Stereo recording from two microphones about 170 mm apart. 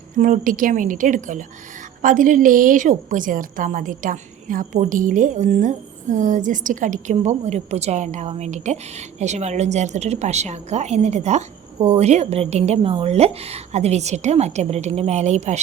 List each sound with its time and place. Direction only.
0.2 s a woman's voice: 50° right (ahead or behind)